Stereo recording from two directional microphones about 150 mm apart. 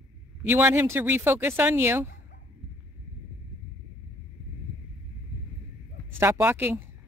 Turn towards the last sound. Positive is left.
turn(degrees=-15)  # may be behind; listen again after turning